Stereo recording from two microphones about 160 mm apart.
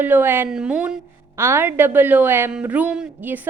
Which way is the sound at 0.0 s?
10° right (ahead or behind).